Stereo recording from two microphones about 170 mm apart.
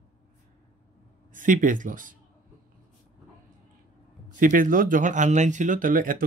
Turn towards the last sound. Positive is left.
turn(degrees=-55)  # may be behind; listen again after turning